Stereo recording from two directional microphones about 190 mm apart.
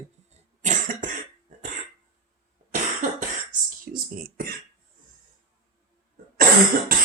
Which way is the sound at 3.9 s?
50° right (ahead or behind).